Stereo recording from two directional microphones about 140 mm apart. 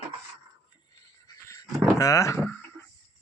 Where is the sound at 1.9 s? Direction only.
20° left (ahead or behind).